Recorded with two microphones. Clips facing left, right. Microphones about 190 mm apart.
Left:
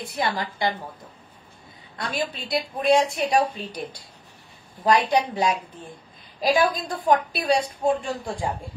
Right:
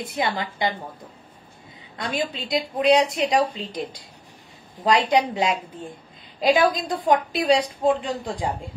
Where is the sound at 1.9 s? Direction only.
20° right (ahead or behind).